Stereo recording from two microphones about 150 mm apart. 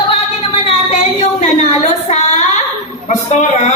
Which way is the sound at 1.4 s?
45° left (ahead or behind).